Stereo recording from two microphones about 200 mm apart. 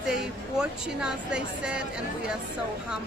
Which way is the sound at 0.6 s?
5° right (ahead or behind).